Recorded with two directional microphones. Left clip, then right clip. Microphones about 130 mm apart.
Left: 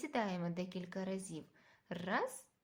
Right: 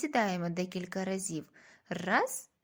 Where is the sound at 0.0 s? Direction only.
40° right (ahead or behind).